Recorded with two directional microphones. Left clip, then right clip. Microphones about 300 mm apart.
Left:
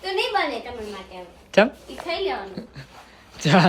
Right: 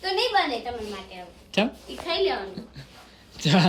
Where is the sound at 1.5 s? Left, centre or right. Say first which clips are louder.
Left 8 dB; centre.